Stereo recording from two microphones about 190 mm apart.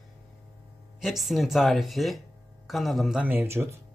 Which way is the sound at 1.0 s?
Centre (ahead or behind).